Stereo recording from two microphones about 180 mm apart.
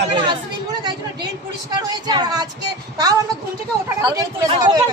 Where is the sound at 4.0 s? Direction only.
20° right (ahead or behind).